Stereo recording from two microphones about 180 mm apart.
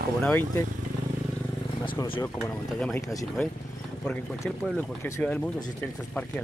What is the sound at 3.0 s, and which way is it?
Speech, 20° left (ahead or behind).